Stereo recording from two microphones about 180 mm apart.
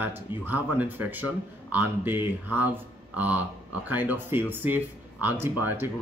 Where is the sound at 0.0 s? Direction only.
10° right (ahead or behind).